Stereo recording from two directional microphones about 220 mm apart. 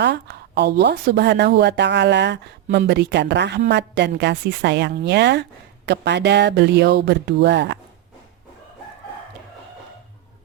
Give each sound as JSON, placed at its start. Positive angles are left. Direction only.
{"t": 0.0, "sound": "a woman's voice", "side_deg": -50}